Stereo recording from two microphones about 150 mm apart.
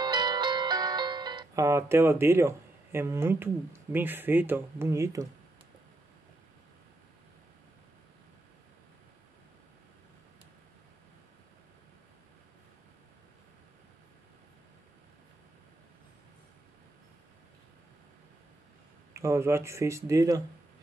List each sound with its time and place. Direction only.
0.0 s music: 30° right (ahead or behind)
19.1 s speech: 20° right (ahead or behind)